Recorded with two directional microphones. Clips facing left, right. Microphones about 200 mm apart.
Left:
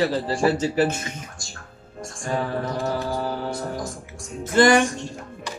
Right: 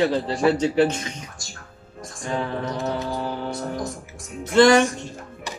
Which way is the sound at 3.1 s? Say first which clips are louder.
Left 1 dB; centre (ahead or behind).